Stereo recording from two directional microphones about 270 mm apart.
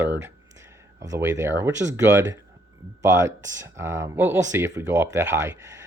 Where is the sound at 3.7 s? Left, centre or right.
Centre.